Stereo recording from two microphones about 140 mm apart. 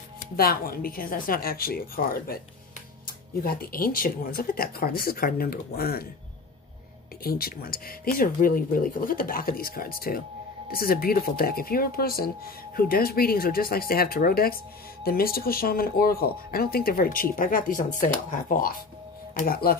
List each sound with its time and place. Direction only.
0.2 s speech: 90° left
7.2 s speech: 90° left; by 18.7 s 75° left (ahead or behind)
19.3 s speech: 90° left